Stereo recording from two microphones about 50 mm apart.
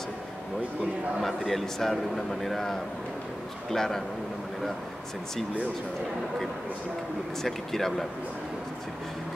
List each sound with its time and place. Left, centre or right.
1.2 s a man's voice: centre
7.4 s a man's voice: centre